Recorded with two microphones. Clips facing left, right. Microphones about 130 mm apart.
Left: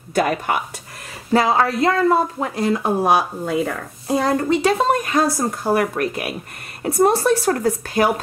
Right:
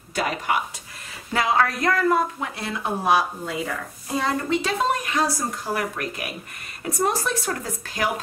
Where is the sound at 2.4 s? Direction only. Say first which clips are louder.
Left 9 dB; 40° left (ahead or behind).